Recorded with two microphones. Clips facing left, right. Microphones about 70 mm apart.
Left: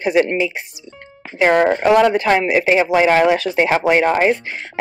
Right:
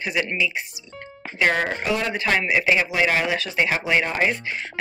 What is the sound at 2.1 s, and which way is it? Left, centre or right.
Speech, left.